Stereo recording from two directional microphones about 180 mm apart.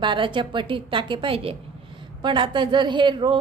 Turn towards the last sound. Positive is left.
turn(degrees=-25)  # may be behind; listen again after turning